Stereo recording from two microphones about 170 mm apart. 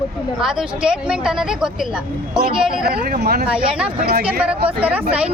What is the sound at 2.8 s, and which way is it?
Speech, 65° right (ahead or behind).